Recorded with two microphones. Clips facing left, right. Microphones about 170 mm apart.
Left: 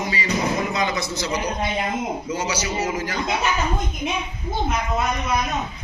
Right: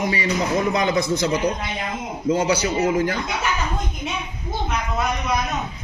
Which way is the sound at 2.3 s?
55° right (ahead or behind).